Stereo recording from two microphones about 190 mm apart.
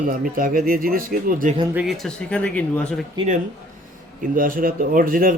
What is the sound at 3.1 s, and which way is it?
Speech, 40° right (ahead or behind).